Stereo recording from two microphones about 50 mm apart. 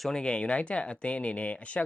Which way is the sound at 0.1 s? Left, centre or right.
Centre.